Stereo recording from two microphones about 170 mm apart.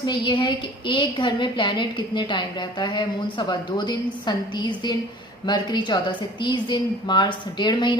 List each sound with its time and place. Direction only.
0.0 s a woman's voice: 25° left (ahead or behind)